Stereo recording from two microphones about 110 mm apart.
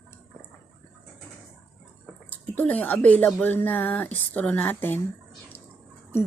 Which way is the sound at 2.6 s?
15° left (ahead or behind).